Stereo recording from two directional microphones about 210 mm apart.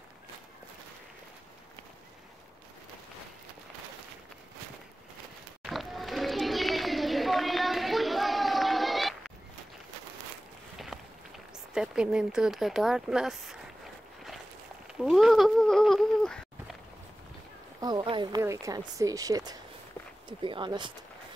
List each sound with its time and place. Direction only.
5.6 s children playing: centre (ahead or behind)
10.9 s walk: centre (ahead or behind)
11.7 s speech: 5° right (ahead or behind)
15.0 s a sound: centre (ahead or behind)
17.7 s speech: 20° right (ahead or behind)